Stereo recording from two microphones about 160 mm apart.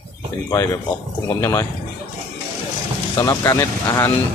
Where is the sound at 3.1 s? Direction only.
20° left (ahead or behind).